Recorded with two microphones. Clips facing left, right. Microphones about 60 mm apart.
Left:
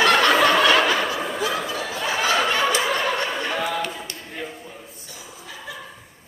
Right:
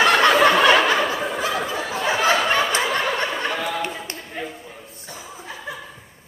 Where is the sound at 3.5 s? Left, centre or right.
Centre.